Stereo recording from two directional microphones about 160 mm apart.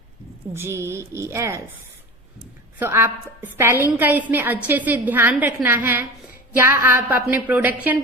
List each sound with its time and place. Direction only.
0.5 s a woman's voice: 15° right (ahead or behind)
2.7 s a woman's voice: 15° right (ahead or behind)